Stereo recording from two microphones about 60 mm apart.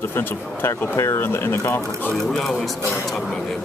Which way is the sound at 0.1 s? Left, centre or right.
Left.